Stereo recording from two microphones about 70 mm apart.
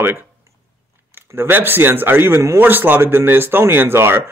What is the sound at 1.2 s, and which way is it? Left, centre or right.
Speech, right.